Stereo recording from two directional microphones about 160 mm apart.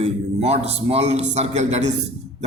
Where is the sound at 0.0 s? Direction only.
40° right (ahead or behind).